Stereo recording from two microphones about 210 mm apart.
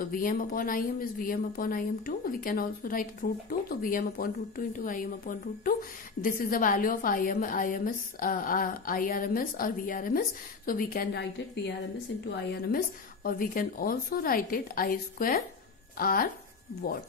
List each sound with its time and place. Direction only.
0.0 s a woman's voice: 40° left (ahead or behind)
12.6 s a woman's voice: 45° left (ahead or behind)